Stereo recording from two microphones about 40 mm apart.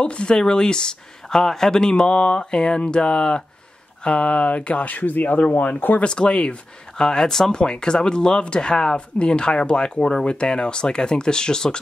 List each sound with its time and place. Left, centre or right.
0.0 s speech: left
6.0 s speech: left
7.0 s speech: centre
7.5 s speech: left